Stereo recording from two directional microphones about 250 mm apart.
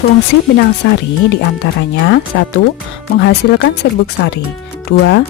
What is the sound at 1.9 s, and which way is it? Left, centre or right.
Speech, left.